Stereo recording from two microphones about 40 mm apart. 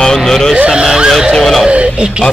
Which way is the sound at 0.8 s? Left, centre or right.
Right.